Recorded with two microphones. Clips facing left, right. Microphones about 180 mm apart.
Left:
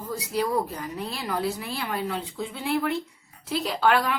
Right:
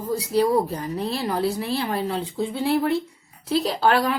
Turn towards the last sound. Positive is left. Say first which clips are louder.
# right 3 dB
turn(degrees=-35)  # may be behind; listen again after turning